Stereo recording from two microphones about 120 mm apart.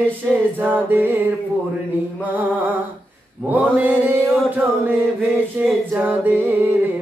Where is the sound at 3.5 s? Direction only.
15° right (ahead or behind).